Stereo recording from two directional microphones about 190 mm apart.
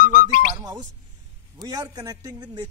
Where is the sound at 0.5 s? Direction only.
20° right (ahead or behind).